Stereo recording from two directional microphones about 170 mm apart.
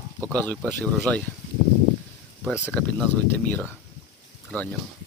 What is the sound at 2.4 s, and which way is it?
Speech, 5° right (ahead or behind).